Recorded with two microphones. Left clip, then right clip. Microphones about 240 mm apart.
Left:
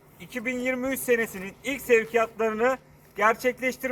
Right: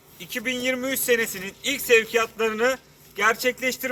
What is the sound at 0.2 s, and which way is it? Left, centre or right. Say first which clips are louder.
A man's voice: right 3 dB; centre.